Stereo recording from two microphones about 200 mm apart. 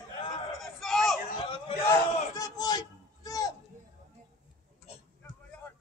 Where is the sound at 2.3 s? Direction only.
20° left (ahead or behind).